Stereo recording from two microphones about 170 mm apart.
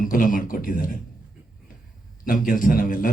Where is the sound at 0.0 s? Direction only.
55° left (ahead or behind).